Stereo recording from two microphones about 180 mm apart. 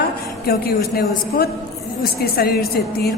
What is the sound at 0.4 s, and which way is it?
A woman's voice, 60° left (ahead or behind).